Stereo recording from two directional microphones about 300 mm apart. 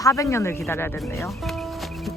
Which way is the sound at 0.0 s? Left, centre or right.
Centre.